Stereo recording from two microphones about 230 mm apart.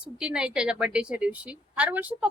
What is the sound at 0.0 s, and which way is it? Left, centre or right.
A woman's voice, centre.